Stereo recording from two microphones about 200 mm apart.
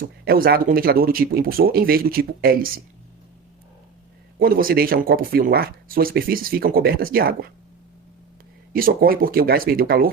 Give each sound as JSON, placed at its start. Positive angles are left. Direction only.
{"t": 0.0, "sound": "speech", "side_deg": -45}
{"t": 4.4, "sound": "speech", "side_deg": -45}
{"t": 8.7, "sound": "speech", "side_deg": -45}